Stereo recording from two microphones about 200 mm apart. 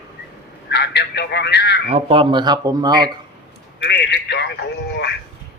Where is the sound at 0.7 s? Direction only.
55° left (ahead or behind).